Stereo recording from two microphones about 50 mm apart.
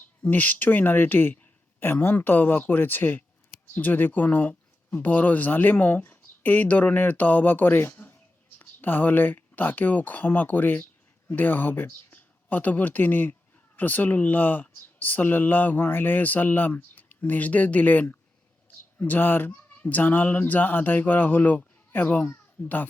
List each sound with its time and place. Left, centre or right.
0.3 s speech: left
19.5 s speech: left
22.6 s a child's voice: left